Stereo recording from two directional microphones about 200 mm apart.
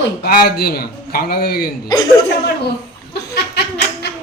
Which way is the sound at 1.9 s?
20° left (ahead or behind).